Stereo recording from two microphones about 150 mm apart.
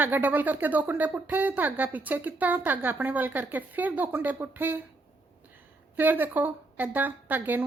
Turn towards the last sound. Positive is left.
turn(degrees=-10)  # may be behind; listen again after turning